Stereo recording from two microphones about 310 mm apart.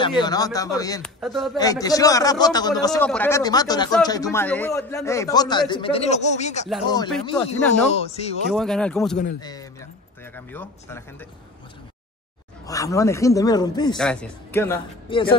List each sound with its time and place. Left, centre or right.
0.2 s a man's voice: centre
1.2 s speech: centre
1.6 s a man's voice: centre
8.5 s a man's voice: centre
12.6 s a man's voice: centre
13.9 s a man's voice: centre